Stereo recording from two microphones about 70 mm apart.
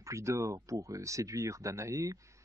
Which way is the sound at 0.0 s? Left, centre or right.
Right.